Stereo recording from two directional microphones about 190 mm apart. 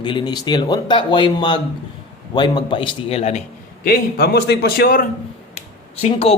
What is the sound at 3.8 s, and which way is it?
A man's voice, 55° left (ahead or behind).